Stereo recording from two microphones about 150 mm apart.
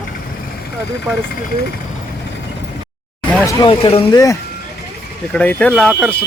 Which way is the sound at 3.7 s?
35° left (ahead or behind).